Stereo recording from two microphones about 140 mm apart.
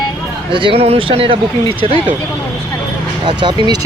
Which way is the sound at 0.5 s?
40° right (ahead or behind).